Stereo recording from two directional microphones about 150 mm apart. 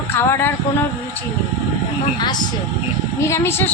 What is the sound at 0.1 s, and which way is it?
Speech, 15° left (ahead or behind).